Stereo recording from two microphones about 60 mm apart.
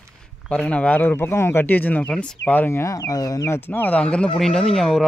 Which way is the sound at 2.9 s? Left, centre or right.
Left.